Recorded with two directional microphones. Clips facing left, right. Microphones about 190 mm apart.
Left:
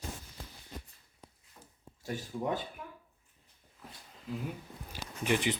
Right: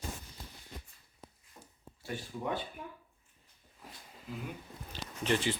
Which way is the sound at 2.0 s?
40° left (ahead or behind).